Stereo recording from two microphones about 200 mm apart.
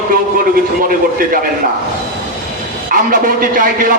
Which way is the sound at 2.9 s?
45° right (ahead or behind).